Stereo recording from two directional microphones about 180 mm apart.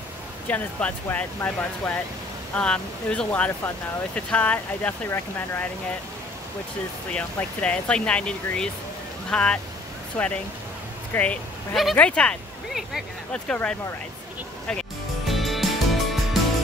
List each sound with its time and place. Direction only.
0.5 s speech: 5° left (ahead or behind)
7.1 s speech: 5° left (ahead or behind)
14.7 s music: centre (ahead or behind)